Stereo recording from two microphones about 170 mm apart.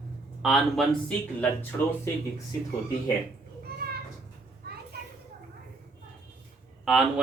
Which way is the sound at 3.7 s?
70° right (ahead or behind).